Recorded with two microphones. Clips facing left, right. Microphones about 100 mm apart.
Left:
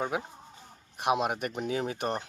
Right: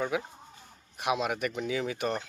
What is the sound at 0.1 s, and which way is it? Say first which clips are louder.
Speech: right 1 dB; 45° left (ahead or behind).